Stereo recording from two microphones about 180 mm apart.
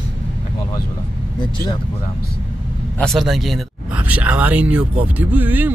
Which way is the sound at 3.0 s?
Centre (ahead or behind).